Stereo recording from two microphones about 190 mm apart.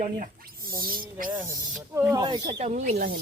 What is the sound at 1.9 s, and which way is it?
Speech, 20° right (ahead or behind).